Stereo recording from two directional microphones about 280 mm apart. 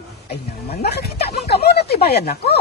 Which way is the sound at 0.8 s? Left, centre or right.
Left.